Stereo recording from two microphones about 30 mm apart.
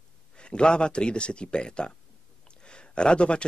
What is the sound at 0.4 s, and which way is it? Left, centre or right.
Speech, left.